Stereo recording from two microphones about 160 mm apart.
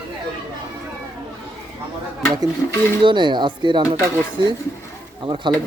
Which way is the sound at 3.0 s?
30° right (ahead or behind).